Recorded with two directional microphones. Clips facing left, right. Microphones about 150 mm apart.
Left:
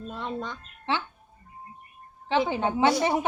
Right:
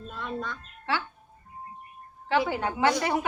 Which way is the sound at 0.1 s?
25° left (ahead or behind).